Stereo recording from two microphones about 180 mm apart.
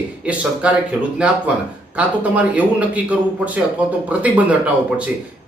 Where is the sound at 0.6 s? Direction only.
5° right (ahead or behind).